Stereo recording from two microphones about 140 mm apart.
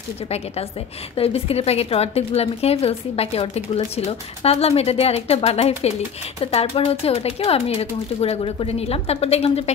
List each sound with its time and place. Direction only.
1.1 s a woman's voice: 45° left (ahead or behind)